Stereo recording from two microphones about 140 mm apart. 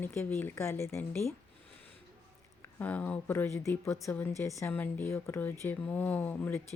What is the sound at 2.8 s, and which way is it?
Speech, 10° left (ahead or behind).